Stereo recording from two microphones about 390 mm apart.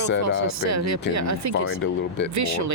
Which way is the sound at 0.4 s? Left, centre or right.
Right.